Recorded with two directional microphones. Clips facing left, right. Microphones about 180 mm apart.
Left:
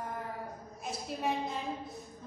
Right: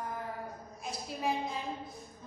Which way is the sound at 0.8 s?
Centre (ahead or behind).